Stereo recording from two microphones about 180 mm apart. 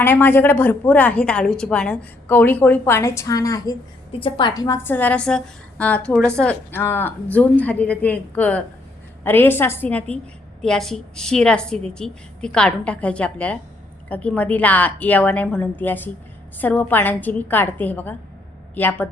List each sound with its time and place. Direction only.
0.0 s a woman's voice: 10° left (ahead or behind)